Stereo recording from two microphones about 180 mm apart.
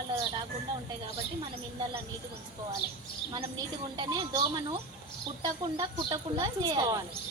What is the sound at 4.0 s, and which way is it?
Speech, 25° right (ahead or behind).